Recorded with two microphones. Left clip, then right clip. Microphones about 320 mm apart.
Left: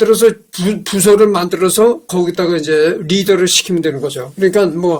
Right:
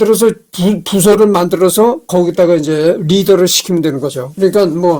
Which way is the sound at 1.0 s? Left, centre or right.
Right.